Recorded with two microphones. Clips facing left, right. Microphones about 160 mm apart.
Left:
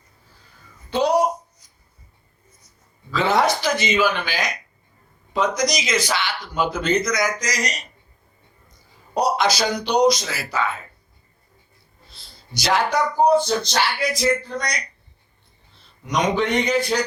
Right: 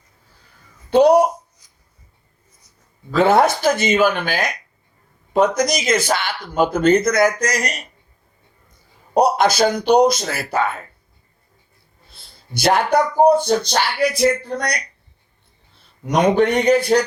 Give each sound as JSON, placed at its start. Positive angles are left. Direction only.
{"t": 0.9, "sound": "a sound", "side_deg": -60}
{"t": 3.1, "sound": "speech", "side_deg": -50}
{"t": 9.1, "sound": "speech", "side_deg": -55}
{"t": 12.1, "sound": "speech", "side_deg": -55}
{"t": 16.0, "sound": "speech", "side_deg": -55}